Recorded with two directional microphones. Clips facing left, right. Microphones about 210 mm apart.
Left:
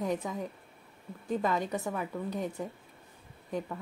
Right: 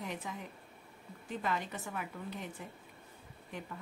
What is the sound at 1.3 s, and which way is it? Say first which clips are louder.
Speech: left 7 dB; 40° left (ahead or behind).